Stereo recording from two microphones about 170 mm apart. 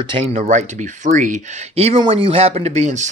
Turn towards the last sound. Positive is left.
turn(degrees=-45)  # may be behind; listen again after turning